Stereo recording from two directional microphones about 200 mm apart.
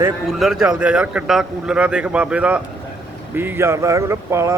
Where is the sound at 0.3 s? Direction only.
Centre (ahead or behind).